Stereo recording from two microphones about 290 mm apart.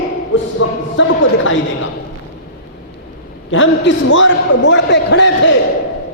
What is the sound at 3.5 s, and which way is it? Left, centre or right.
A man's voice, left.